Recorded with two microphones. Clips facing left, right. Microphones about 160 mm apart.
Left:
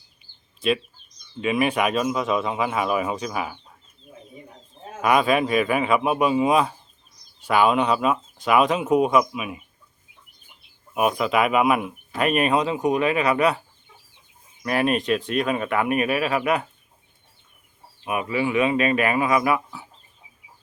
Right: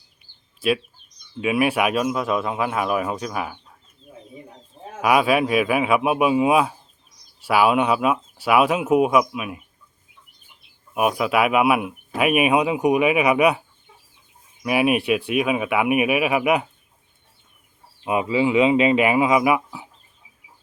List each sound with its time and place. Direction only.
0.6 s speech: 5° right (ahead or behind)
4.9 s speech: 5° right (ahead or behind)
10.9 s speech: 5° right (ahead or behind)
14.6 s speech: 10° right (ahead or behind)
18.0 s speech: 20° right (ahead or behind)